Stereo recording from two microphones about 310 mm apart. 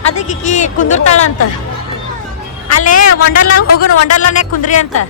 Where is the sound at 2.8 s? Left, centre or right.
Left.